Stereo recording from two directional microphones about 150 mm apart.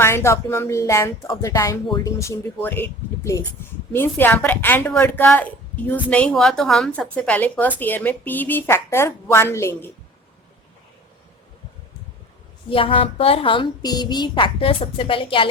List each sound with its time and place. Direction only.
0.0 s a woman's voice: 15° left (ahead or behind)
12.7 s a woman's voice: 35° left (ahead or behind)